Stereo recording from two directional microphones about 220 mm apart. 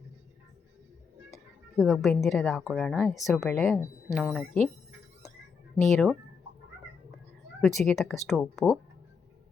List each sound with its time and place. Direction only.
1.3 s a woman's voice: centre (ahead or behind)
5.7 s speech: centre (ahead or behind)
7.6 s speech: centre (ahead or behind)